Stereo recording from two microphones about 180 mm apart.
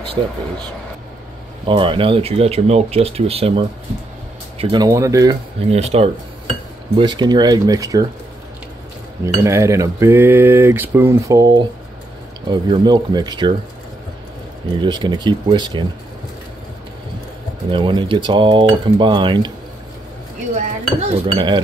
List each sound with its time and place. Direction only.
0.2 s speech: 30° right (ahead or behind)
1.7 s speech: 30° right (ahead or behind)
5.7 s speech: 35° right (ahead or behind)
7.0 s speech: 25° right (ahead or behind)
9.2 s cutlery: 15° right (ahead or behind)
12.4 s speech: 25° right (ahead or behind)
14.8 s speech: 25° right (ahead or behind)
17.6 s speech: 25° right (ahead or behind)
20.5 s dishes: 35° right (ahead or behind)